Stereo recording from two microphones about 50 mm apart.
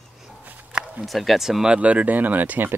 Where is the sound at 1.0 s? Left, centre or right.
Centre.